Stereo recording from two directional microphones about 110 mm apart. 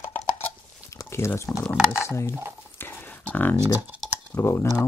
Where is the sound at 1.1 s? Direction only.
25° left (ahead or behind).